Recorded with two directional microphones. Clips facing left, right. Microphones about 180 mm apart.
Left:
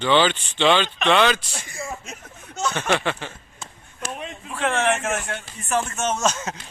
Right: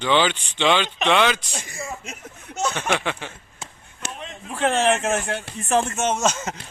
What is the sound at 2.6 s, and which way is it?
Speech, 25° right (ahead or behind).